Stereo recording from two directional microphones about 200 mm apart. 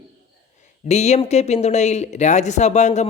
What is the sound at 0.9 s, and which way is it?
Speech, 35° left (ahead or behind).